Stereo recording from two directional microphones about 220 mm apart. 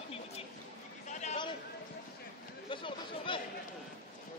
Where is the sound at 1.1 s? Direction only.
30° left (ahead or behind).